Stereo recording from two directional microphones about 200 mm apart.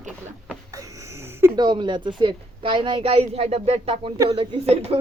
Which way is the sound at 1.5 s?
20° right (ahead or behind).